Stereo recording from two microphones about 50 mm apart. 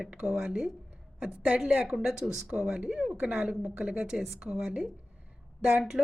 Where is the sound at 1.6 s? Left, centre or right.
Centre.